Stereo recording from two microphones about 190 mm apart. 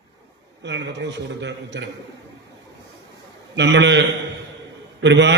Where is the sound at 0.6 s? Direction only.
70° right (ahead or behind).